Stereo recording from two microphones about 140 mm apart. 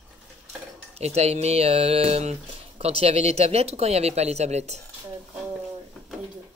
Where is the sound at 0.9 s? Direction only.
50° right (ahead or behind).